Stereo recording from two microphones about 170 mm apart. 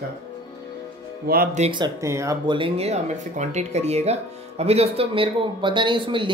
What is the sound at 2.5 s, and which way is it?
Speech, 35° right (ahead or behind).